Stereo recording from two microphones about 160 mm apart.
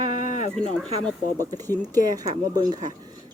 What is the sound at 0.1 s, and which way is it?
Sheep, 50° left (ahead or behind).